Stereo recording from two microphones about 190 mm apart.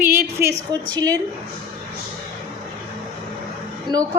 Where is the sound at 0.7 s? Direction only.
20° right (ahead or behind).